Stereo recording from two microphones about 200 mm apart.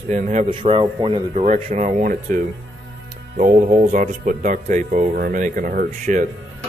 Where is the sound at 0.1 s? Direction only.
40° right (ahead or behind).